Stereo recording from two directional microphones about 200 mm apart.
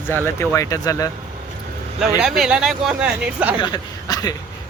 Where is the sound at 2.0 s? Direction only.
5° right (ahead or behind).